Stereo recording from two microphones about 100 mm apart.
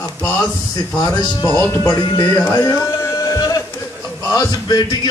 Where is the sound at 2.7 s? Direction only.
35° left (ahead or behind).